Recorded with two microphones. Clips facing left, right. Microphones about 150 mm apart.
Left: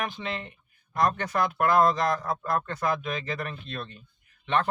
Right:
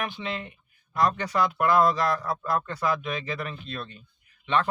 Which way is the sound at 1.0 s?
50° left (ahead or behind).